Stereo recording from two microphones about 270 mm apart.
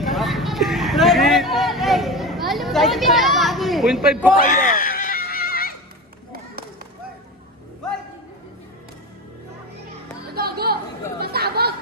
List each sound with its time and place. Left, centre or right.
0.0 s vehicle: centre
4.4 s a sound: left
10.3 s chatter: right